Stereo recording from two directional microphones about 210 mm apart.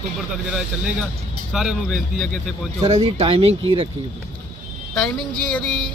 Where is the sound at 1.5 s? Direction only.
Centre (ahead or behind).